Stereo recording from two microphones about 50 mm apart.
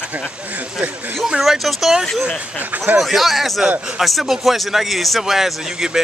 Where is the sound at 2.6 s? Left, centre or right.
Right.